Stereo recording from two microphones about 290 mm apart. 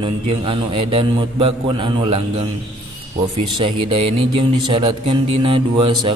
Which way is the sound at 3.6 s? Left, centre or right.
Centre.